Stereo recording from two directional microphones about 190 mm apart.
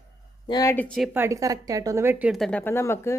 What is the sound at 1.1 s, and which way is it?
A woman's voice, 15° right (ahead or behind).